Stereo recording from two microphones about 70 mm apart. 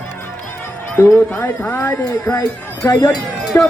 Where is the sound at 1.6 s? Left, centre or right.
Left.